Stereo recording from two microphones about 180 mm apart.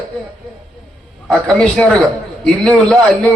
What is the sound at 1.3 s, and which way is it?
A man's voice, 5° left (ahead or behind).